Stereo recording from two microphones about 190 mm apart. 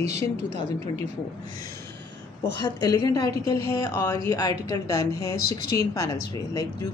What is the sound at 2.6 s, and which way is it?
Speech, 20° left (ahead or behind).